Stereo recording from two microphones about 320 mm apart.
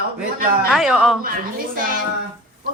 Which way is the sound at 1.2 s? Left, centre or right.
Right.